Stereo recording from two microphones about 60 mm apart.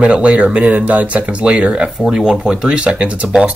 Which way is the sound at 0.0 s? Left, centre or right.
Centre.